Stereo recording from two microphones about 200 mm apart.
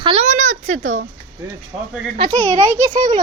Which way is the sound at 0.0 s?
30° right (ahead or behind).